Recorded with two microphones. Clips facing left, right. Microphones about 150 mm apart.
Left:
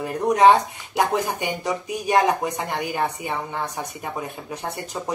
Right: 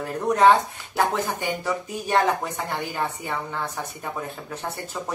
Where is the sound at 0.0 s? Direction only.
10° left (ahead or behind).